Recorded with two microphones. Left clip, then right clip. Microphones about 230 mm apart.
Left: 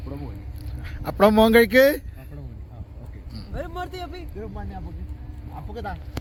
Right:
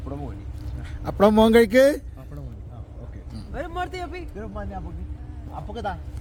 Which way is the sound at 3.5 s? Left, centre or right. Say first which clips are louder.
Right 3 dB; left.